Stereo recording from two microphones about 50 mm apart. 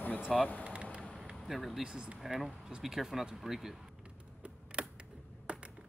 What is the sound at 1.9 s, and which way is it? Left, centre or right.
Speech, centre.